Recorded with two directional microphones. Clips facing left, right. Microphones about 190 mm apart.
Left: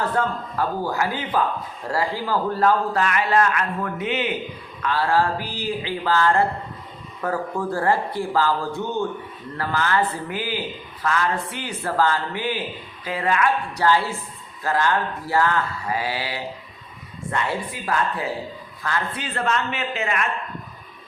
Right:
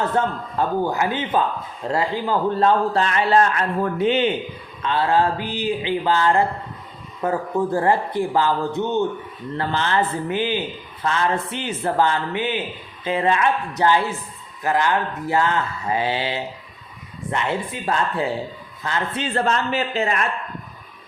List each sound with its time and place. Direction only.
0.0 s a man's voice: 25° right (ahead or behind)